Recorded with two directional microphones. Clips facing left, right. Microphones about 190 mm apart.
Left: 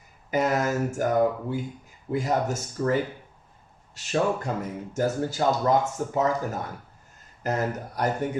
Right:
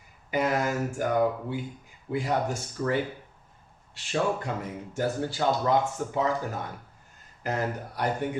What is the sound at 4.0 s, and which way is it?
Speech, 40° left (ahead or behind).